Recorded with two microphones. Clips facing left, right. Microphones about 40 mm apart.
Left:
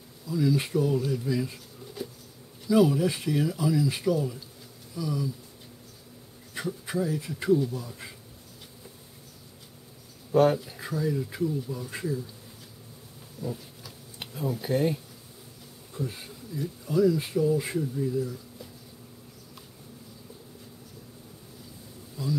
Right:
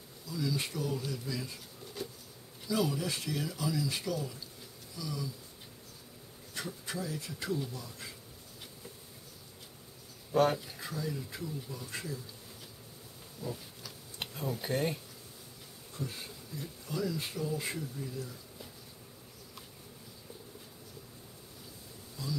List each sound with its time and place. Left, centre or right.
0.3 s speech: centre
2.0 s bee: centre
2.7 s speech: centre
6.5 s speech: centre
10.3 s speech: centre
10.8 s speech: centre
13.4 s a sound: centre
15.9 s speech: centre
22.2 s speech: centre